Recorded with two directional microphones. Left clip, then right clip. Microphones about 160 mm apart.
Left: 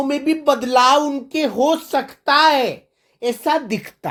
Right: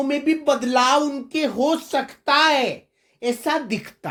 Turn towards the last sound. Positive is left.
turn(degrees=40)  # may be behind; listen again after turning